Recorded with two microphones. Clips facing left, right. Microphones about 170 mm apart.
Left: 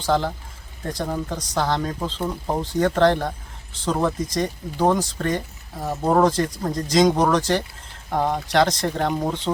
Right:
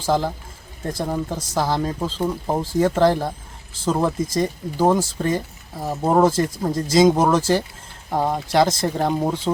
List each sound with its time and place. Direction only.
0.0 s speech: 5° right (ahead or behind)